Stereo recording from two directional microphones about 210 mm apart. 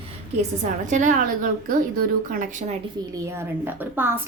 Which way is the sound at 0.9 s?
35° right (ahead or behind).